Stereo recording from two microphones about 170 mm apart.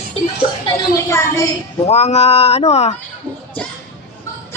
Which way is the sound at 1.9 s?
40° left (ahead or behind).